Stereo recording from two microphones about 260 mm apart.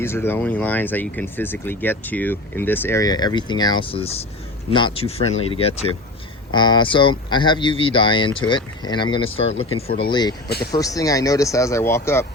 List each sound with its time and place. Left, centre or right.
0.0 s speech: centre
10.5 s speech: left
10.8 s speech: centre